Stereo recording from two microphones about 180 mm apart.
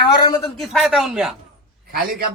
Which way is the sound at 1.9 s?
55° right (ahead or behind).